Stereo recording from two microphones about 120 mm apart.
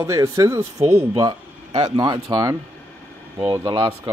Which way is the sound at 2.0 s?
35° right (ahead or behind).